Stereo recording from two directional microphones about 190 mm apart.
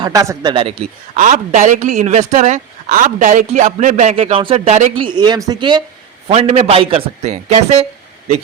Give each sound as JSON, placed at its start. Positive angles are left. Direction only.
{"t": 0.0, "sound": "a man's voice", "side_deg": -15}
{"t": 1.2, "sound": "a woman's voice", "side_deg": -40}
{"t": 5.0, "sound": "a man's voice", "side_deg": -25}